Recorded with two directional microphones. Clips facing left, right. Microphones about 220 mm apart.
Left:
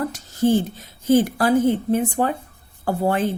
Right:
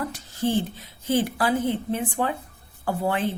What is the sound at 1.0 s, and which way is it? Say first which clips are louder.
A woman's voice: left 6 dB; 45° left (ahead or behind).